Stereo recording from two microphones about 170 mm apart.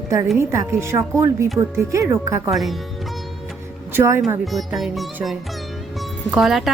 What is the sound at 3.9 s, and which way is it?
Speech, 15° right (ahead or behind).